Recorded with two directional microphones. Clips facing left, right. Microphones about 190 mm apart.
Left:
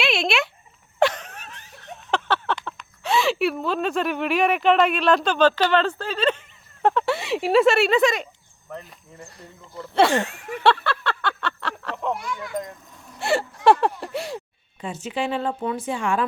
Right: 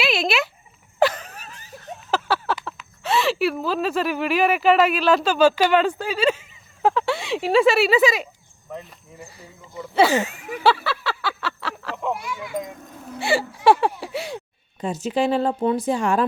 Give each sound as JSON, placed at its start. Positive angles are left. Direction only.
{"t": 0.0, "sound": "a sound", "side_deg": 0}
{"t": 6.8, "sound": "speech", "side_deg": 0}
{"t": 14.8, "sound": "speech", "side_deg": -40}